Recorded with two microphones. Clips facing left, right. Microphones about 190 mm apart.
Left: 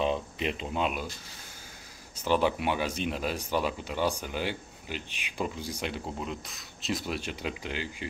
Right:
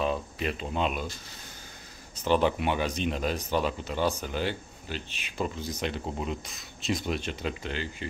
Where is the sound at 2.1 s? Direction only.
10° left (ahead or behind).